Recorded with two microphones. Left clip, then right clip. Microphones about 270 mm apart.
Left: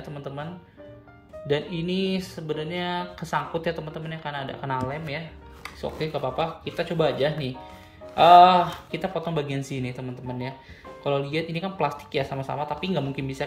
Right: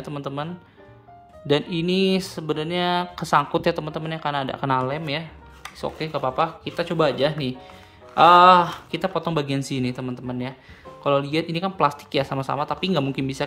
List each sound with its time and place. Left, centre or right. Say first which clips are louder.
0.0 s speech: right 6 dB; right
1.5 s speech: right 5 dB; centre